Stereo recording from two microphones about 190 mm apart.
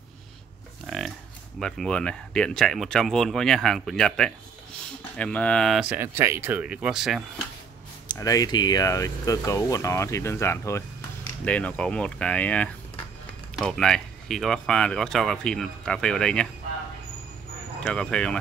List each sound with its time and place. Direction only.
0.8 s livestock: centre (ahead or behind)
1.6 s speech: 5° left (ahead or behind)
8.1 s speech: 20° left (ahead or behind)
17.8 s speech: 5° left (ahead or behind)